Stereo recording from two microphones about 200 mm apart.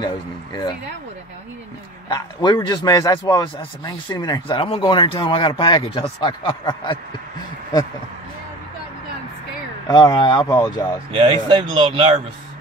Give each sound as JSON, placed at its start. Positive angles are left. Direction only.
{"t": 0.0, "sound": "a man's voice", "side_deg": 20}
{"t": 2.0, "sound": "a man's voice", "side_deg": 20}
{"t": 9.8, "sound": "a man's voice", "side_deg": 20}
{"t": 11.1, "sound": "speech", "side_deg": -25}